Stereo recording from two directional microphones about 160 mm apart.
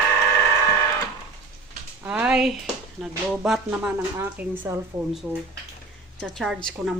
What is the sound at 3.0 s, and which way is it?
A woman's voice, centre (ahead or behind).